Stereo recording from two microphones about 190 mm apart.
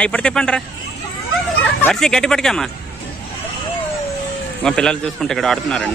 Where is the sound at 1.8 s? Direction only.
5° left (ahead or behind).